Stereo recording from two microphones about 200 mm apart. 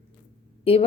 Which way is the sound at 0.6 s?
30° left (ahead or behind).